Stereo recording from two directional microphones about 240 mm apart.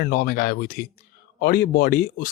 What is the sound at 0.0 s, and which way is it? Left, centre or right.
Speech, left.